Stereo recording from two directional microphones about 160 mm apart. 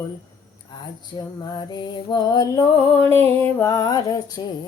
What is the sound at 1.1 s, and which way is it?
Music, 25° left (ahead or behind).